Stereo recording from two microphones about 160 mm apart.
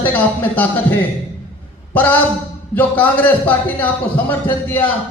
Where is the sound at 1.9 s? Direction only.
10° left (ahead or behind).